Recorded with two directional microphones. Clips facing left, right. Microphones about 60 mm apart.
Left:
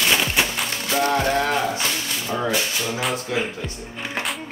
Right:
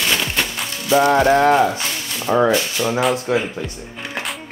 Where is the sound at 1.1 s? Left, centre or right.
Right.